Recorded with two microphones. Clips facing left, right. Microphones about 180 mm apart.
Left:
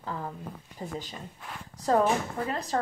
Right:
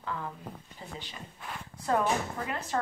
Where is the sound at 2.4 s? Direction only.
35° left (ahead or behind).